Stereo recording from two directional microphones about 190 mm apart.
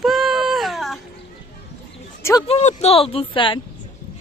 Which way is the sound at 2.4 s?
35° left (ahead or behind).